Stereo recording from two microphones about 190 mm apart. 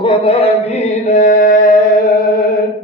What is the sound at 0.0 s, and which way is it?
Mantra, 30° left (ahead or behind).